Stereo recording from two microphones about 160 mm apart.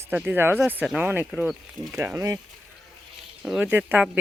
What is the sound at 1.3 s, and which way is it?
Speech, centre (ahead or behind).